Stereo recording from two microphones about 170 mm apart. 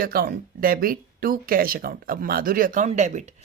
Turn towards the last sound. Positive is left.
turn(degrees=-45)  # may be behind; listen again after turning